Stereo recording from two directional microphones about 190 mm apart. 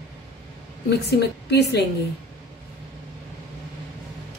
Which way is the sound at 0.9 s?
60° left (ahead or behind).